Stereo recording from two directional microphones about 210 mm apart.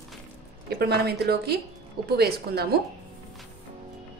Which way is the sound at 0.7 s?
50° right (ahead or behind).